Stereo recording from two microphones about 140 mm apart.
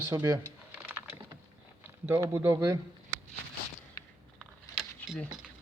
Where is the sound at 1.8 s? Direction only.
15° right (ahead or behind).